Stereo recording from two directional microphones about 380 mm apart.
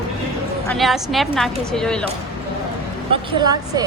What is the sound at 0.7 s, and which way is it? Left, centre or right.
A woman's voice, centre.